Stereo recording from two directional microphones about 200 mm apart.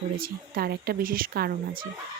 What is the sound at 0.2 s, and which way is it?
Speech, 50° right (ahead or behind).